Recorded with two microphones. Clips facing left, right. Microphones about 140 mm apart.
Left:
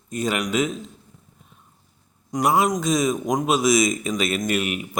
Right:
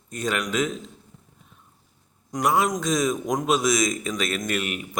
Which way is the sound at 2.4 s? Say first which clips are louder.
Left 2 dB; 15° left (ahead or behind).